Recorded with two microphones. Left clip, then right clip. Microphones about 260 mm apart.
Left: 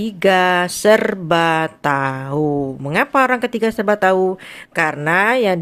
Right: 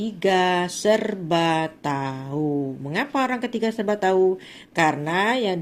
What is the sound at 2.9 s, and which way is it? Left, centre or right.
Speech, left.